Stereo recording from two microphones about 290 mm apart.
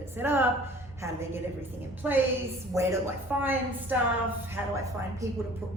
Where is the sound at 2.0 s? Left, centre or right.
Centre.